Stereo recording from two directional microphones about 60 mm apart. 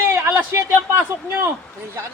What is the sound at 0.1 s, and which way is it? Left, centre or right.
A man's voice, right.